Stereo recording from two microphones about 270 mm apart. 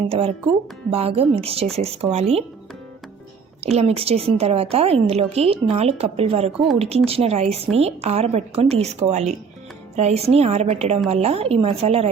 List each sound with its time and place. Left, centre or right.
0.1 s a woman's voice: right
3.6 s a woman's voice: right